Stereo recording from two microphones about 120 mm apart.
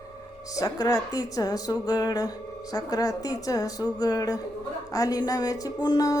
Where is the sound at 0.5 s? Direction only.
30° left (ahead or behind).